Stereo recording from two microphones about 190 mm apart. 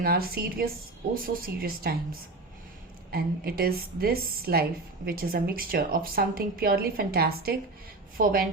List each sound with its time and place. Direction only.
0.0 s a woman's voice: 50° right (ahead or behind)
3.1 s a woman's voice: 50° right (ahead or behind)